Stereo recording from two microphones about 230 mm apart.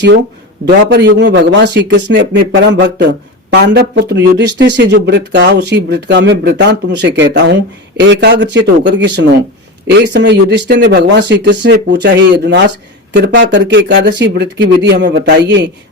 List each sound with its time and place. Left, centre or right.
0.9 s speech: right